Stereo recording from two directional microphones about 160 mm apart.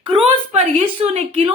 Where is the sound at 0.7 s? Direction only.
45° right (ahead or behind).